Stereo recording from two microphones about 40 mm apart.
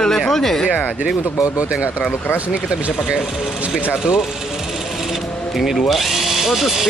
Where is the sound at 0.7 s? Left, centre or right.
Left.